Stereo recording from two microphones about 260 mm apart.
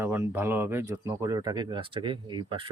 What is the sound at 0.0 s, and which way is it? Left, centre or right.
Speech, centre.